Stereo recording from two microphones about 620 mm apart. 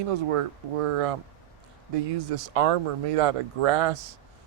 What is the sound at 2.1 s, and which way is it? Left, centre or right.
Speech, right.